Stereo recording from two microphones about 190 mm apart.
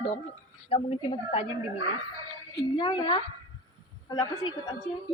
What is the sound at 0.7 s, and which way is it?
Speech, 30° left (ahead or behind).